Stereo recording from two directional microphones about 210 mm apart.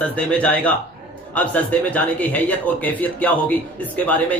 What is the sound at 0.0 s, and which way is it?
Speech, 5° left (ahead or behind).